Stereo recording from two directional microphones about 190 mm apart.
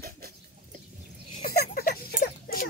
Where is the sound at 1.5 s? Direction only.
55° left (ahead or behind).